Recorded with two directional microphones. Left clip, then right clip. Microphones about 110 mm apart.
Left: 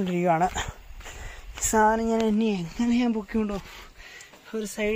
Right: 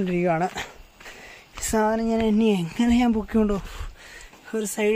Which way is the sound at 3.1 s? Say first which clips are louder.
Right 5 dB; 45° right (ahead or behind).